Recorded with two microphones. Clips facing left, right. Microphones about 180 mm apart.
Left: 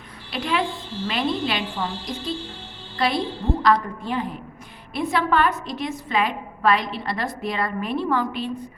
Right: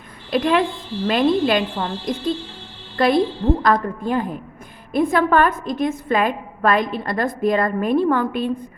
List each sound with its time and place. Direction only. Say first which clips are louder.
0.3 s a woman's voice: right 7 dB; 45° right (ahead or behind)